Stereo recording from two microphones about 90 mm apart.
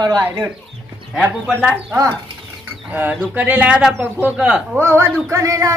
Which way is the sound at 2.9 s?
20° right (ahead or behind).